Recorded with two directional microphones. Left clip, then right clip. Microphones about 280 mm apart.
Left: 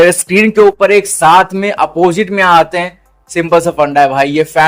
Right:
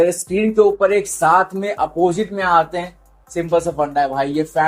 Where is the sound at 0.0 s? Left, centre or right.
Left.